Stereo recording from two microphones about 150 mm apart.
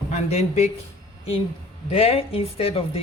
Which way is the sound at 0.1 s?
45° left (ahead or behind).